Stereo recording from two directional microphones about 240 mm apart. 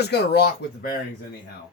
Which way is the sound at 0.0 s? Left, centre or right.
Left.